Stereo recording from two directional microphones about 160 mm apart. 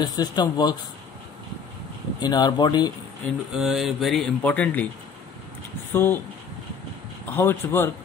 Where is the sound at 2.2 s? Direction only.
25° left (ahead or behind).